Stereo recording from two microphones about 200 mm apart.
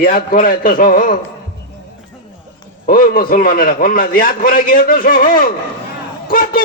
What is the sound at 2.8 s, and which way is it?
A man's voice, 45° left (ahead or behind).